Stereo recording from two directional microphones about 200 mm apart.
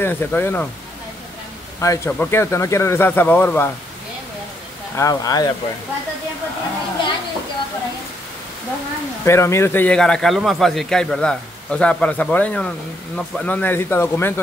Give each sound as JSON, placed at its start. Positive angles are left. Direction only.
{"t": 0.0, "sound": "speech", "side_deg": 10}
{"t": 1.8, "sound": "speech", "side_deg": 10}
{"t": 4.9, "sound": "speech", "side_deg": 15}
{"t": 9.2, "sound": "a man's voice", "side_deg": 15}